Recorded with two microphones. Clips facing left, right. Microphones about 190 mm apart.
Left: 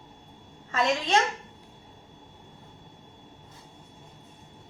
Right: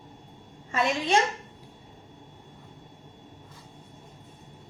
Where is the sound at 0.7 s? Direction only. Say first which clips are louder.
Even; 10° right (ahead or behind).